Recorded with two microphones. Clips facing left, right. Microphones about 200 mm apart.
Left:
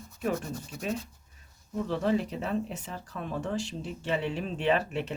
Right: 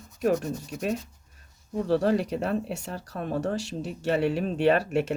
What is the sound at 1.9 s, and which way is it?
Speech, 75° right (ahead or behind).